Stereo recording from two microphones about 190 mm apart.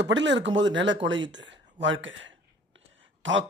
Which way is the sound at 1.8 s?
80° right.